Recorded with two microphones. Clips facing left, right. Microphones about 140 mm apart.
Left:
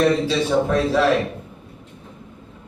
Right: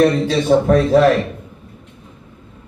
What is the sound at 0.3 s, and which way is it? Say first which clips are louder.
Speech: right 5 dB; 50° right (ahead or behind).